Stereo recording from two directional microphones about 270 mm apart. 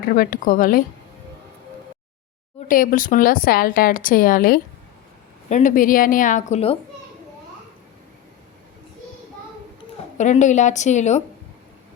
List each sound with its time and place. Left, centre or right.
0.1 s a woman's voice: left
2.6 s a woman's voice: left
10.2 s a woman's voice: left